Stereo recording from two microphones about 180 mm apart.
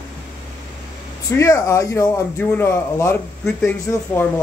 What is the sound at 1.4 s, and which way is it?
A man's voice, 15° left (ahead or behind).